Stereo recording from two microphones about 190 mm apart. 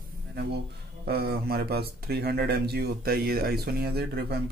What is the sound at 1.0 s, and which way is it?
Speech, 55° right (ahead or behind).